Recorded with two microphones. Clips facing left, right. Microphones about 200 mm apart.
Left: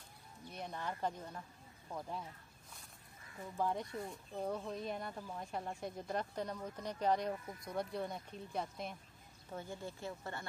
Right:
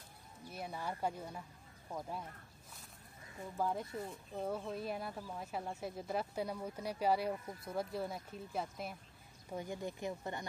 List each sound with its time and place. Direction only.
0.5 s speech: 5° right (ahead or behind)
3.5 s speech: 5° right (ahead or behind)
9.5 s speech: 15° right (ahead or behind)